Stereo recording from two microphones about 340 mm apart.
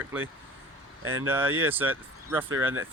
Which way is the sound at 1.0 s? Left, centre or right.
Right.